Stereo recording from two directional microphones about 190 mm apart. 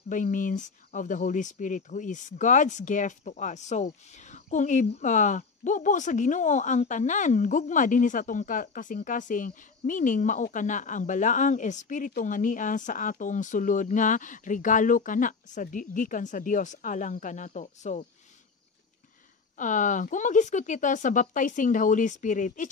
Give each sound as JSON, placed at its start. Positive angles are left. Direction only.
{"t": 0.1, "sound": "speech", "side_deg": 45}
{"t": 19.6, "sound": "speech", "side_deg": 40}